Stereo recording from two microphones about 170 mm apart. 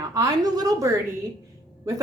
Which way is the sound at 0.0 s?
20° right (ahead or behind).